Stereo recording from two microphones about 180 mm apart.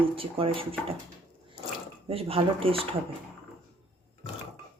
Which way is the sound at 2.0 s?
30° right (ahead or behind).